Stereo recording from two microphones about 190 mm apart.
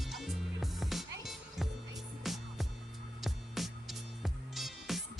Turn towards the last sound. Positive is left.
turn(degrees=0)  # may be behind; listen again after turning